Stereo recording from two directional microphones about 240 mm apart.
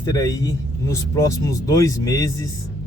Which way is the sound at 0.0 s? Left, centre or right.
Centre.